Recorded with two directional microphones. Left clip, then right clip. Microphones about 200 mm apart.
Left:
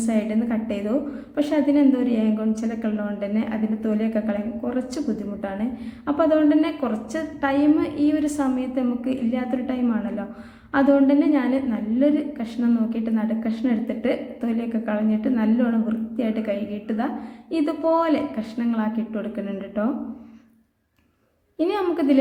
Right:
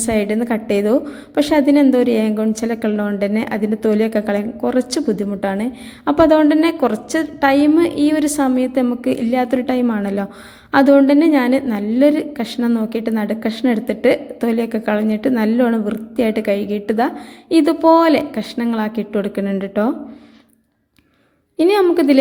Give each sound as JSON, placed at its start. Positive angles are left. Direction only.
{"t": 0.0, "sound": "a woman's voice", "side_deg": -40}
{"t": 21.6, "sound": "a woman's voice", "side_deg": -40}